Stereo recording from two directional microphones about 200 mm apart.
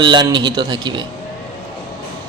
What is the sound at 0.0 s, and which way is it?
A man's voice, 20° right (ahead or behind).